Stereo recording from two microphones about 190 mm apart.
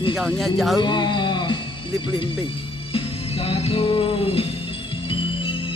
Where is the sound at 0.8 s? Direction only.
25° left (ahead or behind).